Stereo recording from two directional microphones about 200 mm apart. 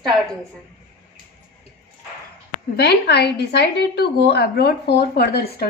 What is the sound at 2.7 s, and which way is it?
A woman's voice, 55° left (ahead or behind).